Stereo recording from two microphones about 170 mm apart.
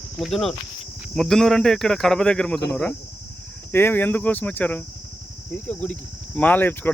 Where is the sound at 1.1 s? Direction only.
Centre (ahead or behind).